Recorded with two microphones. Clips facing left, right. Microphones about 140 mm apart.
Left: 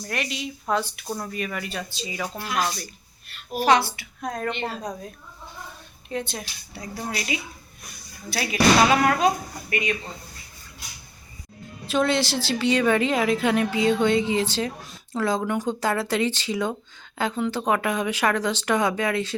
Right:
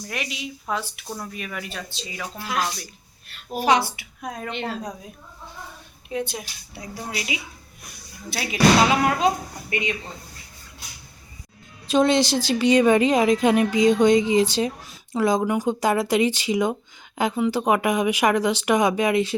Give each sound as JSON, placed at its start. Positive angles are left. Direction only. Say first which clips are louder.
{"t": 0.0, "sound": "speech", "louder": "left 2 dB", "side_deg": -5}
{"t": 3.6, "sound": "a woman's voice", "louder": "left 1 dB", "side_deg": -15}
{"t": 6.1, "sound": "a woman's voice", "louder": "right 2 dB", "side_deg": -10}
{"t": 11.9, "sound": "a woman's voice", "louder": "right 4 dB", "side_deg": -15}